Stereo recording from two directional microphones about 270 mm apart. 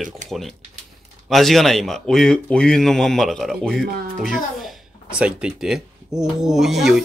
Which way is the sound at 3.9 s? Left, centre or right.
Right.